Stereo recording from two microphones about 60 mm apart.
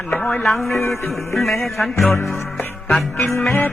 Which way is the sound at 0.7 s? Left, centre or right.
Left.